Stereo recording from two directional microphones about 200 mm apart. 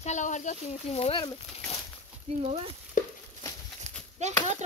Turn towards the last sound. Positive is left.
turn(degrees=-35)  # may be behind; listen again after turning